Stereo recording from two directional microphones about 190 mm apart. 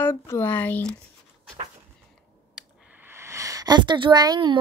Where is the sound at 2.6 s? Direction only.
10° right (ahead or behind).